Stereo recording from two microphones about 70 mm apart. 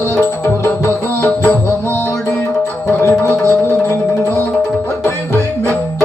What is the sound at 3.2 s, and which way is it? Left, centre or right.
Music, left.